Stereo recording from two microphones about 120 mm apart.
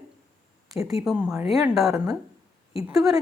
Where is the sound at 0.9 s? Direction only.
Centre (ahead or behind).